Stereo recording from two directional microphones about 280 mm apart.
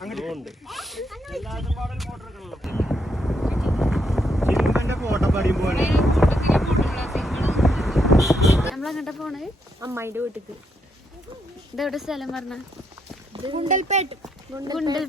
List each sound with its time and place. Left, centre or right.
0.0 s zipper: centre
11.8 s speech: centre
13.3 s speech: centre
14.2 s speech: centre